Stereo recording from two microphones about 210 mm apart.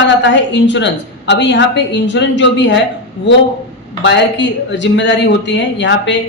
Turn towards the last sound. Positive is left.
turn(degrees=60)  # may be behind; listen again after turning